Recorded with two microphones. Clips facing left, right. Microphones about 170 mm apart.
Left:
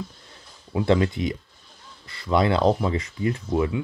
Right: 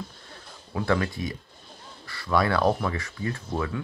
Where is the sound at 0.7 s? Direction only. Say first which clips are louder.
Left 5 dB; 25° left (ahead or behind).